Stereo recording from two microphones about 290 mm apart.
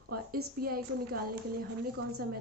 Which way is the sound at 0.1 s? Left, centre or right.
Right.